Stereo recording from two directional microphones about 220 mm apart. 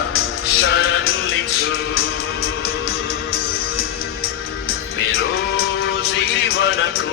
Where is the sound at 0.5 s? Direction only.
50° left (ahead or behind).